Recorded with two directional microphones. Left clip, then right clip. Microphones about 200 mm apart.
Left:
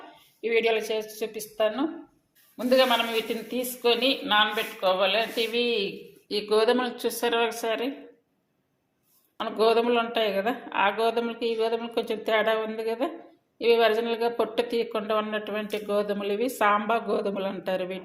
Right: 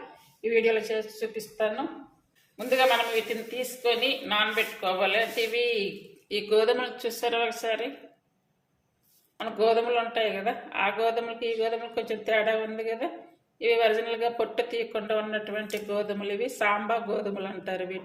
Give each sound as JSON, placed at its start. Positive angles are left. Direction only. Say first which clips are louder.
{"t": 0.4, "sound": "a woman's voice", "louder": "even", "side_deg": 45}
{"t": 2.6, "sound": "a woman's voice", "louder": "left 2 dB", "side_deg": 30}
{"t": 9.4, "sound": "speech", "louder": "left 2 dB", "side_deg": 35}